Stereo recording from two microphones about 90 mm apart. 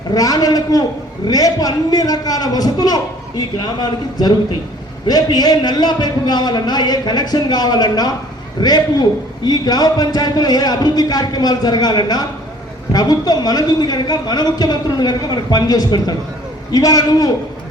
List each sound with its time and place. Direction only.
0.1 s a man's voice: 45° left (ahead or behind)